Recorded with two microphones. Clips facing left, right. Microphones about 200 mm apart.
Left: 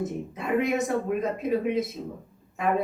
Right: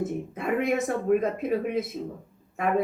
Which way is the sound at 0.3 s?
55° right (ahead or behind).